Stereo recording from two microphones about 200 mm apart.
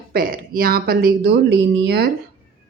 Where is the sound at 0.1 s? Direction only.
45° right (ahead or behind).